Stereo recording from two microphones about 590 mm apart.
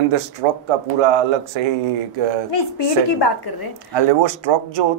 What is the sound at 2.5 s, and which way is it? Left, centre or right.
A woman's voice, left.